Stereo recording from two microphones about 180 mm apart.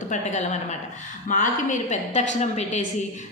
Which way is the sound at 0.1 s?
40° left (ahead or behind).